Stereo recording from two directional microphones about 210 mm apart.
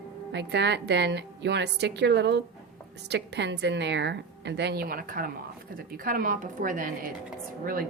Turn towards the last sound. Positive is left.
turn(degrees=-45)  # may be behind; listen again after turning